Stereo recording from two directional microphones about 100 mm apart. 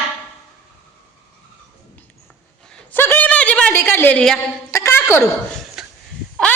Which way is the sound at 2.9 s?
20° left (ahead or behind).